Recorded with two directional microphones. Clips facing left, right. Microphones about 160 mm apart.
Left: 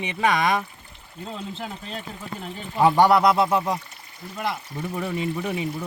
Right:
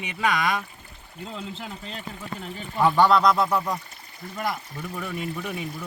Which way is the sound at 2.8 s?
20° left (ahead or behind).